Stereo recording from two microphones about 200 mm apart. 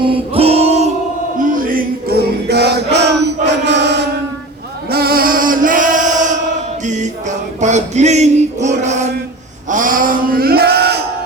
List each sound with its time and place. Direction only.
0.1 s music: 30° right (ahead or behind); by 4.0 s 60° right (ahead or behind)
4.9 s male singing: 50° right (ahead or behind)
6.8 s music: 35° right (ahead or behind)
9.6 s male singing: 40° right (ahead or behind)